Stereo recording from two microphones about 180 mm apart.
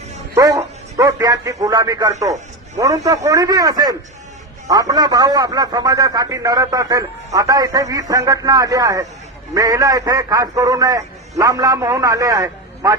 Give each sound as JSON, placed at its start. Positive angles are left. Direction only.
{"t": 0.3, "sound": "a man's voice", "side_deg": -20}